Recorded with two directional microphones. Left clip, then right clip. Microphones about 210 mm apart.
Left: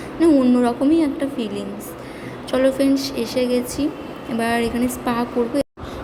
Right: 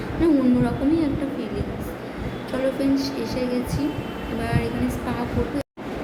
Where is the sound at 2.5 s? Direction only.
35° left (ahead or behind).